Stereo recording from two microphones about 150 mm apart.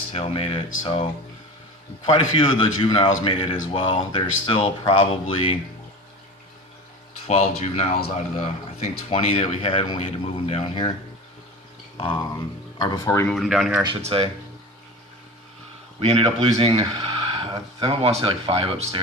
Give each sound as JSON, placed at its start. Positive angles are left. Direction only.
{"t": 0.1, "sound": "a man's voice", "side_deg": 40}
{"t": 2.1, "sound": "a man's voice", "side_deg": 30}
{"t": 7.3, "sound": "a man's voice", "side_deg": 45}
{"t": 11.9, "sound": "speech", "side_deg": 35}
{"t": 13.1, "sound": "speech", "side_deg": 15}
{"t": 13.3, "sound": "speech", "side_deg": 0}
{"t": 14.0, "sound": "speech", "side_deg": -40}
{"t": 16.0, "sound": "speech", "side_deg": -40}